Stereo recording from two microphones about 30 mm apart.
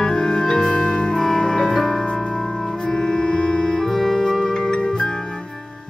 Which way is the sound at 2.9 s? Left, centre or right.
Left.